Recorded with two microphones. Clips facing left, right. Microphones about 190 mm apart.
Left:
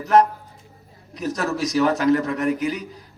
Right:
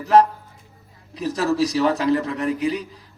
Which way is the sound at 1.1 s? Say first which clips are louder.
Right 3 dB; 30° right (ahead or behind).